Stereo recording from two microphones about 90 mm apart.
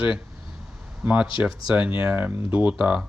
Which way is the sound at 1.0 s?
15° right (ahead or behind).